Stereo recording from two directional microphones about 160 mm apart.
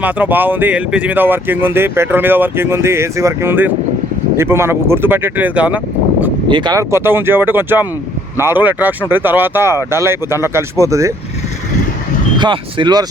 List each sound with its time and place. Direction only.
0.0 s speech: 10° right (ahead or behind)
6.5 s speech: 30° right (ahead or behind)
12.4 s speech: 30° right (ahead or behind)